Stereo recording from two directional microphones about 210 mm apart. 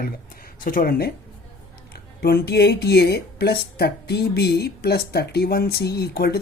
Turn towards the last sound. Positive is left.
turn(degrees=50)  # may be behind; listen again after turning